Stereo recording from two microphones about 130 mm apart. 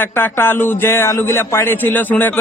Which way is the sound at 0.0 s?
15° left (ahead or behind).